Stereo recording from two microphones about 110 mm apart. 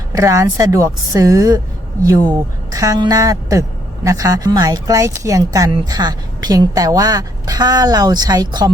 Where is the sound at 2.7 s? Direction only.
35° right (ahead or behind).